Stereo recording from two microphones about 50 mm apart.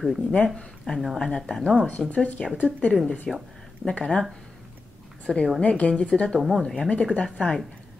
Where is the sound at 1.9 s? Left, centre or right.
Left.